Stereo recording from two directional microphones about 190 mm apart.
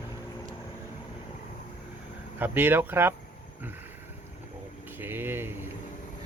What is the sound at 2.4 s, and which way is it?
Speech, 10° right (ahead or behind).